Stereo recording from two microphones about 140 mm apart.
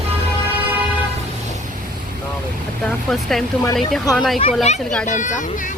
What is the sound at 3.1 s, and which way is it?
Speech, centre (ahead or behind).